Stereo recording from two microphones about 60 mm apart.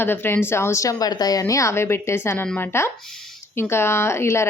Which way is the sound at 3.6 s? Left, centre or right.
Left.